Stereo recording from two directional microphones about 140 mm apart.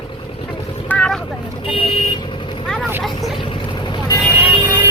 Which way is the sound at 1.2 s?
40° left (ahead or behind).